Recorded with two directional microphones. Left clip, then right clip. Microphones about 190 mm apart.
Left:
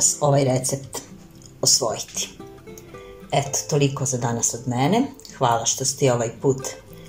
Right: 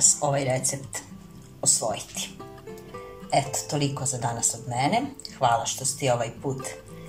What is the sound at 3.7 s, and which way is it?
Speech, 20° left (ahead or behind).